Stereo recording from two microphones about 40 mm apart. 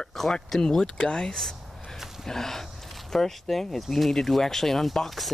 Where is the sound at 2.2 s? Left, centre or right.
Centre.